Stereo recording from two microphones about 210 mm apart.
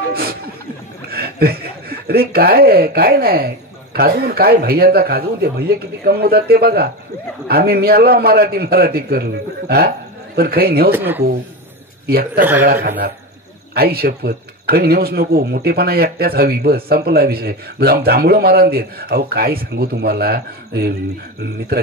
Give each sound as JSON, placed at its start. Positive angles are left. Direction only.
{"t": 0.1, "sound": "a sound", "side_deg": -45}
{"t": 1.0, "sound": "speech", "side_deg": -45}
{"t": 10.9, "sound": "speech", "side_deg": -10}
{"t": 12.4, "sound": "speech", "side_deg": -10}
{"t": 13.7, "sound": "speech", "side_deg": -45}